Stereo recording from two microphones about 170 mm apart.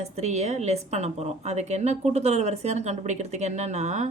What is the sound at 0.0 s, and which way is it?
A woman's voice, 40° right (ahead or behind).